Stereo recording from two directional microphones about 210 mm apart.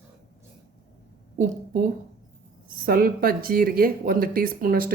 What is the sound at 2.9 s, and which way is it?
A woman's voice, 45° right (ahead or behind).